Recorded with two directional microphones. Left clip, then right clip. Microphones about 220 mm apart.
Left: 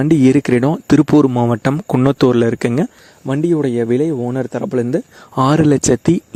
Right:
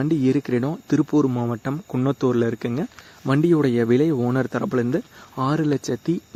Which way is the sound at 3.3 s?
5° left (ahead or behind).